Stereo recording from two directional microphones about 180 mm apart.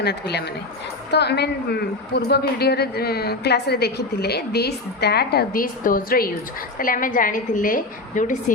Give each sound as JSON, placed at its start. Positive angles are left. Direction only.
{"t": 0.0, "sound": "a woman's voice", "side_deg": 65}